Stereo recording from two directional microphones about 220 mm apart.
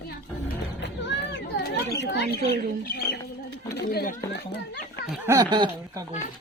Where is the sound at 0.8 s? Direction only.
50° left (ahead or behind).